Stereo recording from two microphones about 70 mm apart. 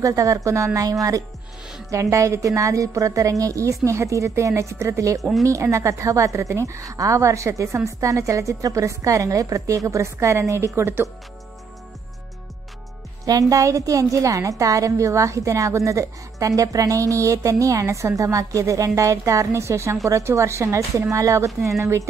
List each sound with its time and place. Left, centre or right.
0.0 s a woman's voice: right
1.9 s a woman's voice: right
13.2 s a woman's voice: right